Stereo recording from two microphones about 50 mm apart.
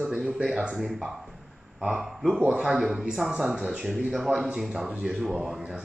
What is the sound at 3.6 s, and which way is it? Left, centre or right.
A man's voice, centre.